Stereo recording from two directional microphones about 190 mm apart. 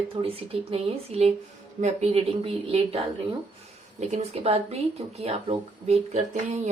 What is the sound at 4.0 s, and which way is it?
Speech, 35° right (ahead or behind).